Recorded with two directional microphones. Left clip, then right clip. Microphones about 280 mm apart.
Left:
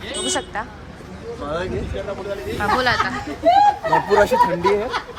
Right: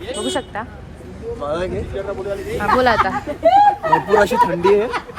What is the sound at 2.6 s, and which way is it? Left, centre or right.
Speech, centre.